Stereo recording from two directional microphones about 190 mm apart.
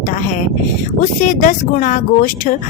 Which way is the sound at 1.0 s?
45° left (ahead or behind).